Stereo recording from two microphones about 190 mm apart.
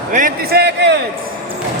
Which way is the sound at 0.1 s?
45° right (ahead or behind).